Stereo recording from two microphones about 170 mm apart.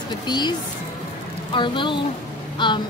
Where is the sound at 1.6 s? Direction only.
30° left (ahead or behind).